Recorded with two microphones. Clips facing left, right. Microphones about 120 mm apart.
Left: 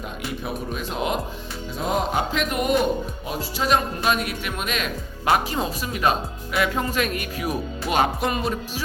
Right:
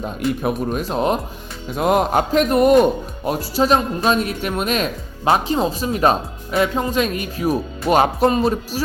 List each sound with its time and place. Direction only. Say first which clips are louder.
0.4 s speech: right 8 dB; 45° right (ahead or behind)
1.7 s music: right 7 dB; 60° right (ahead or behind)
2.3 s speech: right 12 dB; 40° right (ahead or behind)
5.3 s speech: right 4 dB; 25° right (ahead or behind)